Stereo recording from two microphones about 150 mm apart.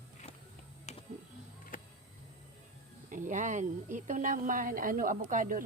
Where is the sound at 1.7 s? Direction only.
65° left (ahead or behind).